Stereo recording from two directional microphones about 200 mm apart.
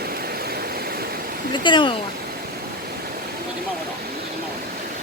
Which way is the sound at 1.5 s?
25° left (ahead or behind).